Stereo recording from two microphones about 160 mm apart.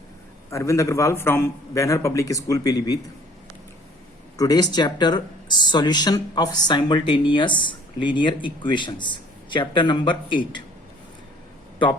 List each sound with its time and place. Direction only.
0.5 s speech: 20° left (ahead or behind)
4.4 s speech: 25° left (ahead or behind)